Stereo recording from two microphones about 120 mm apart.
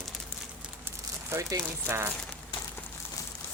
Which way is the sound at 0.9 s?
25° right (ahead or behind).